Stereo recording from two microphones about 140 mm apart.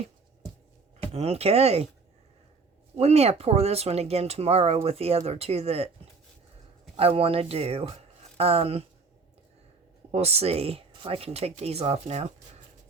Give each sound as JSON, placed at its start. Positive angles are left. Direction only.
{"t": 1.0, "sound": "speech", "side_deg": -45}
{"t": 2.9, "sound": "speech", "side_deg": -50}
{"t": 6.9, "sound": "speech", "side_deg": -40}
{"t": 10.1, "sound": "speech", "side_deg": -50}